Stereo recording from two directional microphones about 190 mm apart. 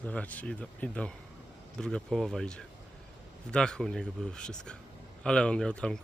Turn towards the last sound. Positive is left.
turn(degrees=5)  # may be behind; listen again after turning